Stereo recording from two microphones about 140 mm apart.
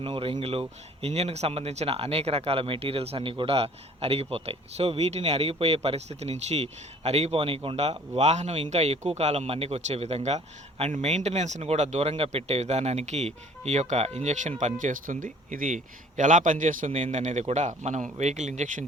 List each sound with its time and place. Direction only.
0.0 s speech: 40° right (ahead or behind); by 16.9 s 65° right (ahead or behind)
16.9 s speech: 55° right (ahead or behind)